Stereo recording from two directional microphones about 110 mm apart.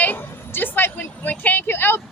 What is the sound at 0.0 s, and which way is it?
Vehicle, 15° left (ahead or behind).